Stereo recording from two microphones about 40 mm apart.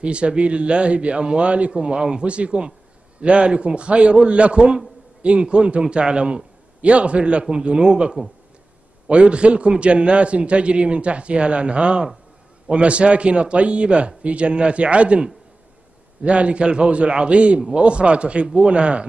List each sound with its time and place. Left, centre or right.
0.0 s a man's voice: right
16.3 s a man's voice: right